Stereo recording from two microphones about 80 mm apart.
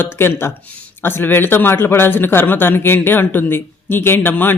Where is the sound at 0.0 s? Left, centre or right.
Left.